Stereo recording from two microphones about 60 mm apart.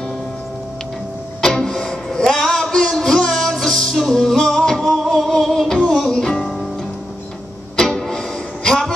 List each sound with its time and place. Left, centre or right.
1.4 s music: centre
7.7 s music: centre